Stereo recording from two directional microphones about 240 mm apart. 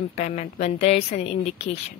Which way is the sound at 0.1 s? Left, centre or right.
Left.